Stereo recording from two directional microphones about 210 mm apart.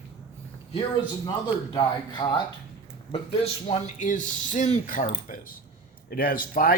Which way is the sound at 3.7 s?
35° left (ahead or behind).